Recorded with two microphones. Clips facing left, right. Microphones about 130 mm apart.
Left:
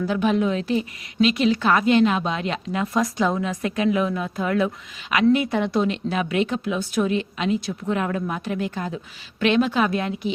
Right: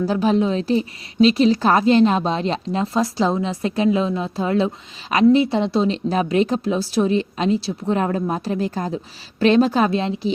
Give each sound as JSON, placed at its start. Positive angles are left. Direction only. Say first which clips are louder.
{"t": 0.0, "sound": "a woman's voice", "louder": "right 3 dB", "side_deg": -35}